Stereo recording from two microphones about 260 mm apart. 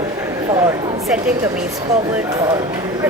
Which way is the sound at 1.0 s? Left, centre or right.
Centre.